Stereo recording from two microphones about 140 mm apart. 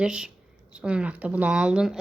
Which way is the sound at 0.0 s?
5° right (ahead or behind).